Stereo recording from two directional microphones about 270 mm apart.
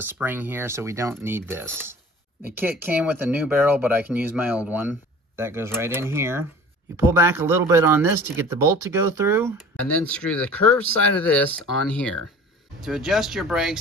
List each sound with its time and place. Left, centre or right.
0.0 s speech: centre
9.8 s speech: centre